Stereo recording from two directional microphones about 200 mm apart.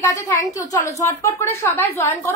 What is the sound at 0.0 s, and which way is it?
A woman's voice, 15° left (ahead or behind).